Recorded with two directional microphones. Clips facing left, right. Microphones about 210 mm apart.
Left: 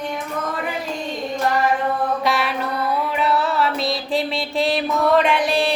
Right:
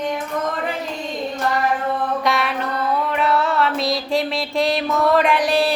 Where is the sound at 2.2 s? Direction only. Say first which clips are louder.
Even; centre (ahead or behind).